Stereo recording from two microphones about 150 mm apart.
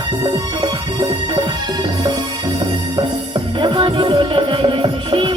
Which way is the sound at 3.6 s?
35° right (ahead or behind).